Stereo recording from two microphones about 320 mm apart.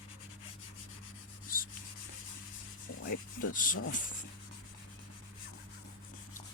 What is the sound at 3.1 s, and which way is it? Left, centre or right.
Speech, left.